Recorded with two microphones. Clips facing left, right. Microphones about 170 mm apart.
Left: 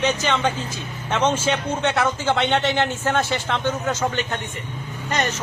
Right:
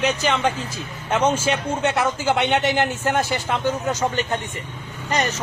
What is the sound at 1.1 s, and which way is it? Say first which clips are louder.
A man's voice: right 1 dB; 10° right (ahead or behind).